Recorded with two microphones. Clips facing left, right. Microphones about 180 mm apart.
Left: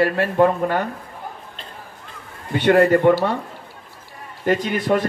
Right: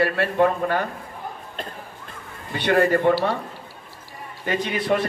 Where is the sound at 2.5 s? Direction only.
50° left (ahead or behind).